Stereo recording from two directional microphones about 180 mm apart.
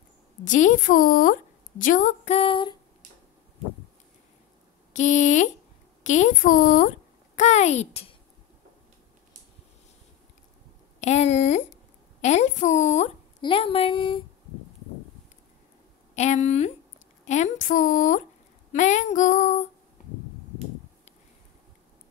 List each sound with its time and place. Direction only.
0.5 s a woman's voice: 45° left (ahead or behind)
1.8 s female singing: 45° left (ahead or behind); by 2.8 s 25° left (ahead or behind)
4.9 s female singing: 40° left (ahead or behind)
6.0 s a woman's voice: 45° left (ahead or behind)
7.3 s female singing: 40° left (ahead or behind)
11.0 s female singing: 40° left (ahead or behind)
13.4 s speech: 30° left (ahead or behind)
16.2 s female singing: 40° left (ahead or behind)
17.2 s a woman's voice: 40° left (ahead or behind)
18.7 s female singing: 40° left (ahead or behind)